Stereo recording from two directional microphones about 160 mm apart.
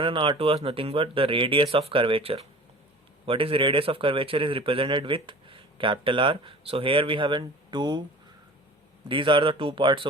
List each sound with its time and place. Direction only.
0.0 s speech: 30° right (ahead or behind)
9.0 s speech: 30° right (ahead or behind)